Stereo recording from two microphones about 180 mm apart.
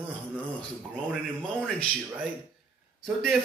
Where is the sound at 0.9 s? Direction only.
5° left (ahead or behind).